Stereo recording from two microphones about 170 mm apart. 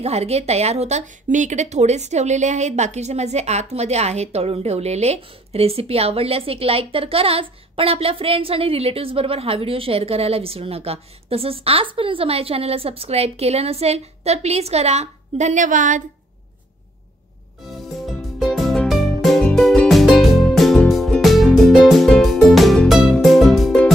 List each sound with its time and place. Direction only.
0.0 s speech: 40° right (ahead or behind)
18.0 s music: centre (ahead or behind)